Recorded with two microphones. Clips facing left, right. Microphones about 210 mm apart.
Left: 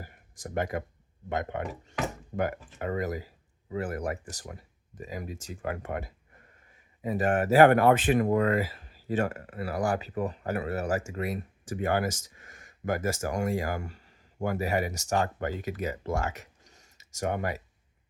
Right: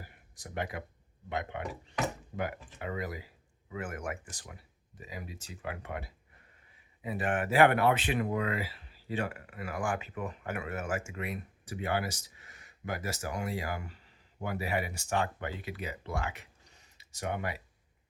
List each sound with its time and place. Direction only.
0.0 s speech: 45° left (ahead or behind)